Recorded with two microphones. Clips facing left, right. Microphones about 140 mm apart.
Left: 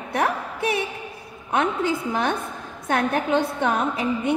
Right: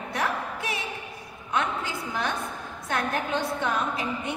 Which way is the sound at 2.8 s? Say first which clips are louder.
Left 6 dB; 60° left (ahead or behind).